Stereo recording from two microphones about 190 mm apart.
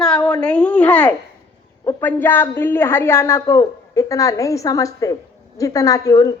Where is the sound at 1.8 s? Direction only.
15° left (ahead or behind).